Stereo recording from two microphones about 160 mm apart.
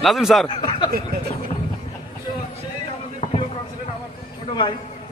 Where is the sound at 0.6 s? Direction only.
30° left (ahead or behind).